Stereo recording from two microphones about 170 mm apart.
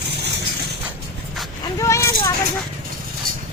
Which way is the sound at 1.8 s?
20° left (ahead or behind).